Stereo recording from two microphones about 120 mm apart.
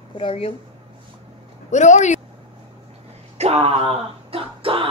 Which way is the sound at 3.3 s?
60° right (ahead or behind).